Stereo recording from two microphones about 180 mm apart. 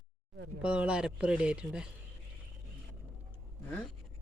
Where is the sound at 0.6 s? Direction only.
5° right (ahead or behind).